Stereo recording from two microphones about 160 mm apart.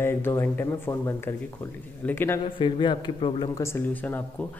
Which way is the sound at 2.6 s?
30° left (ahead or behind).